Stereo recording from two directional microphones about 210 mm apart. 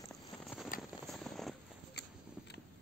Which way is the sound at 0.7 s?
40° left (ahead or behind).